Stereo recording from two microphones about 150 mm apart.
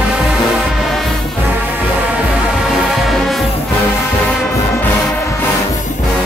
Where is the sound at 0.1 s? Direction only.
Centre (ahead or behind).